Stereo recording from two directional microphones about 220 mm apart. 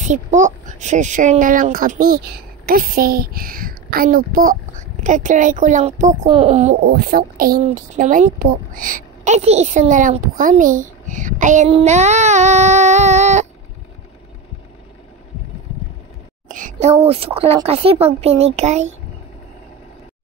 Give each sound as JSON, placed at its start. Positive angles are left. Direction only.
{"t": 0.0, "sound": "speech", "side_deg": -35}
{"t": 6.8, "sound": "speech", "side_deg": -45}
{"t": 16.4, "sound": "a sound", "side_deg": -35}
{"t": 17.0, "sound": "speech", "side_deg": -25}